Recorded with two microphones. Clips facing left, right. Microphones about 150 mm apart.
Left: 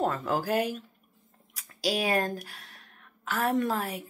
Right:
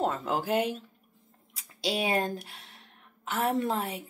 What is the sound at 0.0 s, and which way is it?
Speech, 20° right (ahead or behind).